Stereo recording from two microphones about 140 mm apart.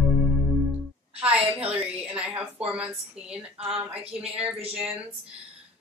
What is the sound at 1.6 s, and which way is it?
Speech, 10° right (ahead or behind).